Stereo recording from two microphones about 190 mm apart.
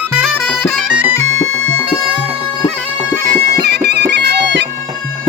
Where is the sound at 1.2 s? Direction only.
90° left.